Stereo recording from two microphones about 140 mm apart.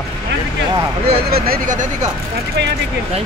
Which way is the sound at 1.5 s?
65° right (ahead or behind).